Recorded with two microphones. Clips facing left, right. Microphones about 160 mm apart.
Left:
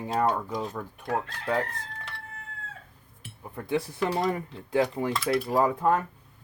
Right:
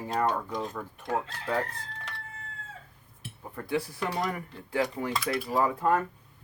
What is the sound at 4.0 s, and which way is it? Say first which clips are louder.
Speech: left 4 dB; centre (ahead or behind).